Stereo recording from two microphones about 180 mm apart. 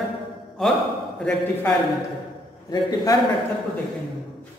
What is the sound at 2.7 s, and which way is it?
Speech, 20° left (ahead or behind).